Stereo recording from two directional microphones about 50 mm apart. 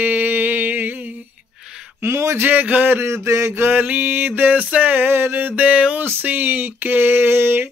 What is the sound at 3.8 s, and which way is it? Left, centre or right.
Mantra, right.